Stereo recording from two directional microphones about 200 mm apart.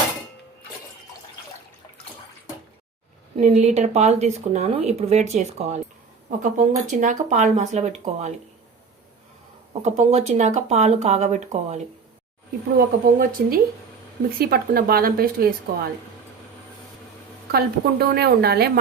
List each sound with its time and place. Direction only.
3.3 s speech: 35° right (ahead or behind)
9.8 s speech: 30° right (ahead or behind)
12.7 s speech: 50° right (ahead or behind)
17.5 s speech: 50° right (ahead or behind)